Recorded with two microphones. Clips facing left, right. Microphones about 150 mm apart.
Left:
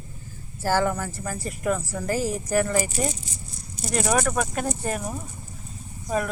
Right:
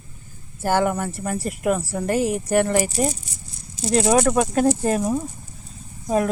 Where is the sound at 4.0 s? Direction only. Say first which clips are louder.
Right 6 dB; 25° right (ahead or behind).